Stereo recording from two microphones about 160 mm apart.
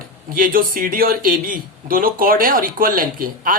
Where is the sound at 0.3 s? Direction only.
60° right (ahead or behind).